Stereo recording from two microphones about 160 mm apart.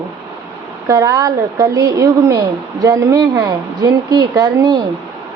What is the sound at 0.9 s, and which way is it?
A woman's voice, 20° right (ahead or behind).